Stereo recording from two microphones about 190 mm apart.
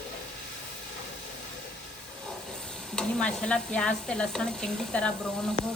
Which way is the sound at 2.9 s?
5° left (ahead or behind).